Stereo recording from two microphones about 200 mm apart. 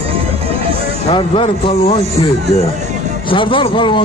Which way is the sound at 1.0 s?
25° left (ahead or behind).